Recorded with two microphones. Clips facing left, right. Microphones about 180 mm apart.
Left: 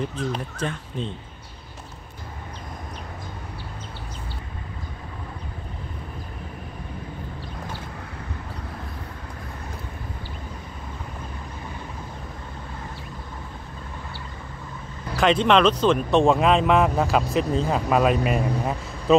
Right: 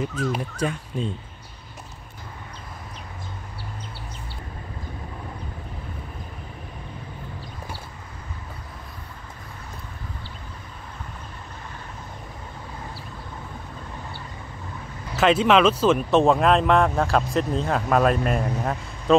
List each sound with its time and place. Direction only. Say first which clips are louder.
0.3 s speech: right 2 dB; 10° right (ahead or behind)
15.1 s speech: right 1 dB; 5° right (ahead or behind)